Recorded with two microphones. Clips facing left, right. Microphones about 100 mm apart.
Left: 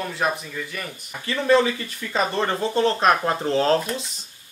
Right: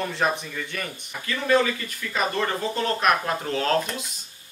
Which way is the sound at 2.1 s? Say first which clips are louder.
Left 2 dB; 30° left (ahead or behind).